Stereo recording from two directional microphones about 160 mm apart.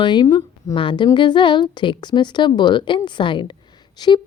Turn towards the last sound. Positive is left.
turn(degrees=25)  # may be behind; listen again after turning